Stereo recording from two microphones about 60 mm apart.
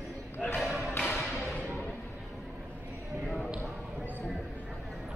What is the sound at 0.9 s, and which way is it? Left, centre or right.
Music, left.